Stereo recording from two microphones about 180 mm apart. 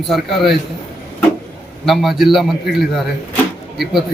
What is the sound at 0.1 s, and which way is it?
Speech, centre (ahead or behind).